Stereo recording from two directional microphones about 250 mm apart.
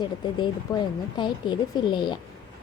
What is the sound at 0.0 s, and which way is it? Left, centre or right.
Speech, centre.